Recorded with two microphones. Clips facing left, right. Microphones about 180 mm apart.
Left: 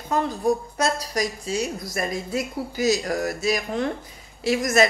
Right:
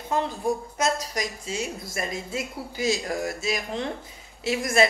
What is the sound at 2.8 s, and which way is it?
Speech, 45° left (ahead or behind).